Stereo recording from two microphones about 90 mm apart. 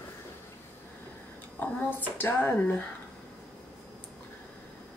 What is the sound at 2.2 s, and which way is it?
Speech, 20° left (ahead or behind).